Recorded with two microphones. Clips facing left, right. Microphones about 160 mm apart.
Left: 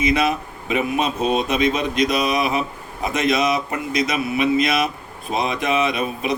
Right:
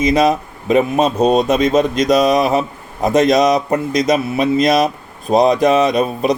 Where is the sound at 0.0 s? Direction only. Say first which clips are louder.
Right 6 dB; 40° right (ahead or behind).